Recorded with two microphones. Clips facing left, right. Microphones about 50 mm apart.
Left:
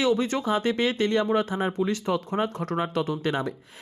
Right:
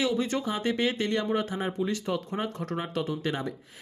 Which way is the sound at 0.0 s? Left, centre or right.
Left.